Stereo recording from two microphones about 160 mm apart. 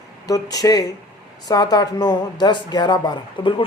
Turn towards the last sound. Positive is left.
turn(degrees=30)  # may be behind; listen again after turning